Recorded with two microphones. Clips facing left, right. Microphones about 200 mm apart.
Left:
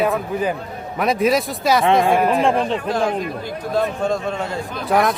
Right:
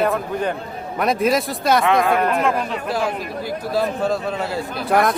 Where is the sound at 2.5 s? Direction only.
30° left (ahead or behind).